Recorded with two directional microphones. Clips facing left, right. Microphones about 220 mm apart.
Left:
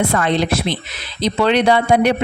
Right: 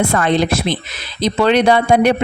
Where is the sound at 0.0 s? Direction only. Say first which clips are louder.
Right 2 dB; 45° right (ahead or behind).